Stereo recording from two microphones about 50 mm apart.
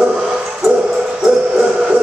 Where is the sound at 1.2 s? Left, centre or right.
Centre.